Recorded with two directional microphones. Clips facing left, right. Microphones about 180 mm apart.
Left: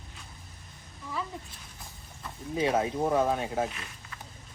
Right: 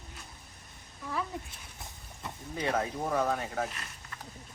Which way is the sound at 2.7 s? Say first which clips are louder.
Left 4 dB; 20° left (ahead or behind).